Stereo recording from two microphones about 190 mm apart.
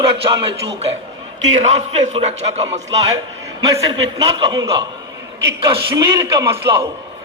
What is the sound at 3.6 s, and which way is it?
A man's voice, 20° right (ahead or behind).